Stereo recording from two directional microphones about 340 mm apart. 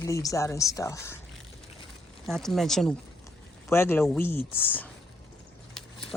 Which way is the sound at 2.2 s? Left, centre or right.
Centre.